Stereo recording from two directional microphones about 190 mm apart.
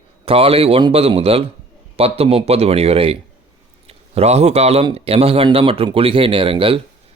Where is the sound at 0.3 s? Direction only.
30° right (ahead or behind).